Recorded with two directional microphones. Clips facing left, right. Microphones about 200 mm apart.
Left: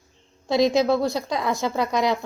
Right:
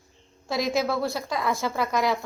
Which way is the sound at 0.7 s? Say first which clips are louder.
Left 5 dB; 20° left (ahead or behind).